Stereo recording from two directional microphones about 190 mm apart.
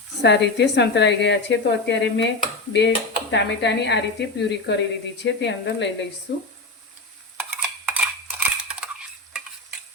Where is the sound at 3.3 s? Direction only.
65° left (ahead or behind).